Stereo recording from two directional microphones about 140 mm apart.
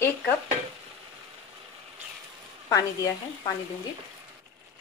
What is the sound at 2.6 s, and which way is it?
Speech, 25° left (ahead or behind).